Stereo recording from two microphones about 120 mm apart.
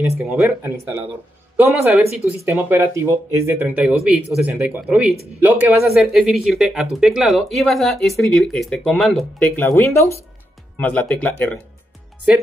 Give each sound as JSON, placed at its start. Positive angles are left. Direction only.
{"t": 0.4, "sound": "speech", "side_deg": -20}
{"t": 5.8, "sound": "speech", "side_deg": 0}
{"t": 9.4, "sound": "speech", "side_deg": 15}